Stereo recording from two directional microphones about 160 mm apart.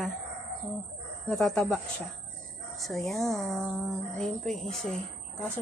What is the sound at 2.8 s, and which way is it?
Speech, centre (ahead or behind).